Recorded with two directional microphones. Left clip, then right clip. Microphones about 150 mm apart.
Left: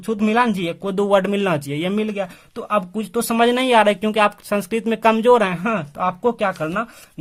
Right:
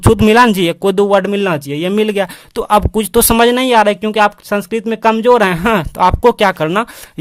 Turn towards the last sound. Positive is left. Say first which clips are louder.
# right 9 dB
turn(degrees=-70)  # may be behind; listen again after turning